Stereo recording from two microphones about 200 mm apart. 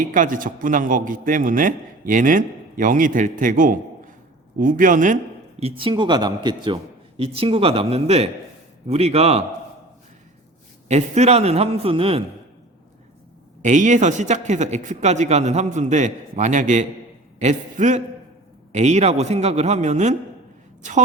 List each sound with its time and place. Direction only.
0.0 s a man's voice: 40° right (ahead or behind)
10.8 s a man's voice: 35° right (ahead or behind)
13.6 s a man's voice: 35° right (ahead or behind)